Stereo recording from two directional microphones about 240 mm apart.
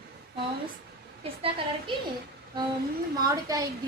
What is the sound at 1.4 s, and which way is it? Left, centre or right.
Speech, centre.